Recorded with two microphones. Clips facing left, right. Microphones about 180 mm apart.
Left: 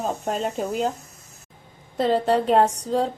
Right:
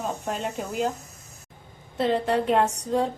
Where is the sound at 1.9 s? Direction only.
35° left (ahead or behind).